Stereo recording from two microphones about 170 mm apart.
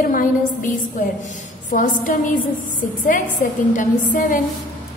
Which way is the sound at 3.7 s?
50° left (ahead or behind).